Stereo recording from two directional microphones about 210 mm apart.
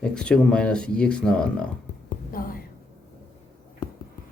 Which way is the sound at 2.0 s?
45° left (ahead or behind).